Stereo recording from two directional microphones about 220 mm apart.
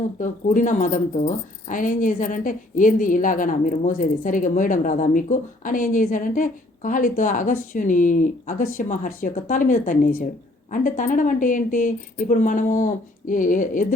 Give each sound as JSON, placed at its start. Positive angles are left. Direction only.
{"t": 0.2, "sound": "speech", "side_deg": 35}